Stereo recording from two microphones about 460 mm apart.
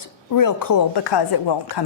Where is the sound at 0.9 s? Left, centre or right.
Left.